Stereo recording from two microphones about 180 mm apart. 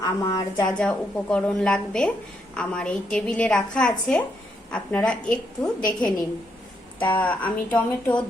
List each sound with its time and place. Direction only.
0.0 s a woman's voice: 20° left (ahead or behind)
0.8 s a woman's voice: 5° left (ahead or behind)
7.2 s a woman's voice: 10° left (ahead or behind)